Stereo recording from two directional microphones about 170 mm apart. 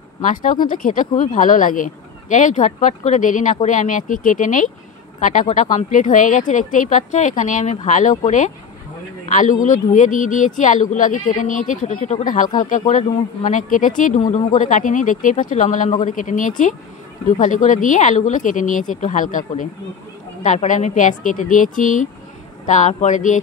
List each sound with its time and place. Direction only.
0.2 s speech: 50° left (ahead or behind)
9.2 s speech: 50° left (ahead or behind)